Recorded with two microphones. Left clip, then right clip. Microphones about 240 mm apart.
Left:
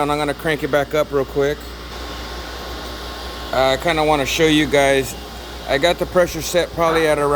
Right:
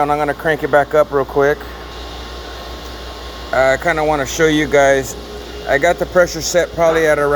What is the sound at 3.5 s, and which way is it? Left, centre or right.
Speech, right.